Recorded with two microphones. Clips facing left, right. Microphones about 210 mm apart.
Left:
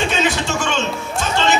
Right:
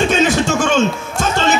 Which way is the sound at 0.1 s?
45° right (ahead or behind).